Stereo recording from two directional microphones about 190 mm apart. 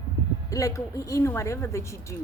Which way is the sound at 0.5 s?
15° left (ahead or behind).